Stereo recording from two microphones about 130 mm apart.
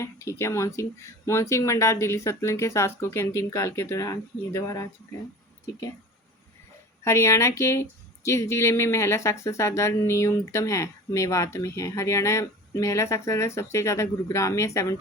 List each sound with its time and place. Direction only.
0.0 s speech: 20° left (ahead or behind)
7.0 s speech: 20° left (ahead or behind)